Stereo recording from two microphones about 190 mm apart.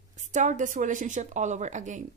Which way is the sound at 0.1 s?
40° right (ahead or behind).